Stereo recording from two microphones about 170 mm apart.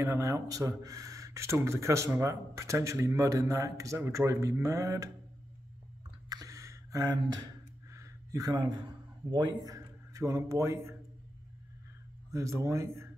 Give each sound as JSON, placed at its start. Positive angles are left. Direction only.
{"t": 0.0, "sound": "speech", "side_deg": -15}
{"t": 6.2, "sound": "a sound", "side_deg": -20}
{"t": 9.6, "sound": "speech", "side_deg": -20}
{"t": 12.3, "sound": "speech", "side_deg": -20}